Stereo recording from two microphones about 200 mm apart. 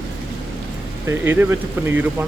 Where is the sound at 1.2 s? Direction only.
10° right (ahead or behind).